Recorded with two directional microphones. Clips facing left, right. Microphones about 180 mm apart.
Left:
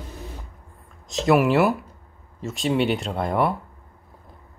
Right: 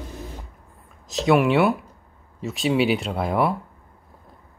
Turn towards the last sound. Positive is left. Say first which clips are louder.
# even
turn(degrees=0)  # may be behind; listen again after turning